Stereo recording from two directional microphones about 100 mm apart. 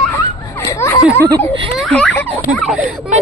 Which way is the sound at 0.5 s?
30° left (ahead or behind).